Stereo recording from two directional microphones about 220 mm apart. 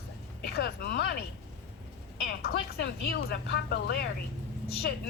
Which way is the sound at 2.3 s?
45° left (ahead or behind).